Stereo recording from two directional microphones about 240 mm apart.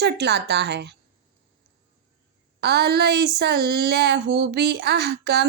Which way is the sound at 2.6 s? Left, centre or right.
Right.